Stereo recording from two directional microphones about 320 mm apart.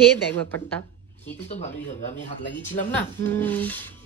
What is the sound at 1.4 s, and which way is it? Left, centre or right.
Speech, left.